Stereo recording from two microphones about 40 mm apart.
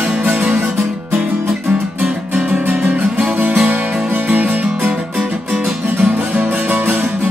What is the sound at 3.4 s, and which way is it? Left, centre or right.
Music, right.